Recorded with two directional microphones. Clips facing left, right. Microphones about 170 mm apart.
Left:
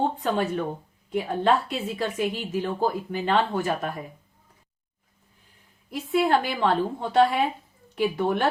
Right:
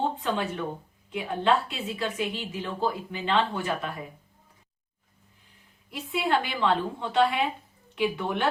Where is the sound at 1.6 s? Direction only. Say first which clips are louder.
Left 3 dB; 40° left (ahead or behind).